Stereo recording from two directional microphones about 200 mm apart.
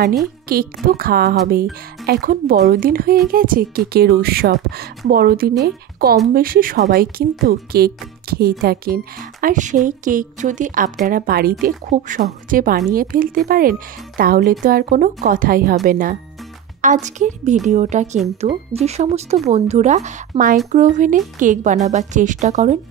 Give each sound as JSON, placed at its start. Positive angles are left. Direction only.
{"t": 0.5, "sound": "speech", "side_deg": -50}